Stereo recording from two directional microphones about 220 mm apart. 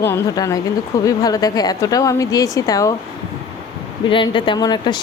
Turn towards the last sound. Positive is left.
turn(degrees=20)  # may be behind; listen again after turning